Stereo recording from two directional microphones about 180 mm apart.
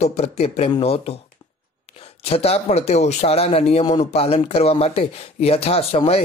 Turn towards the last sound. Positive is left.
turn(degrees=35)  # may be behind; listen again after turning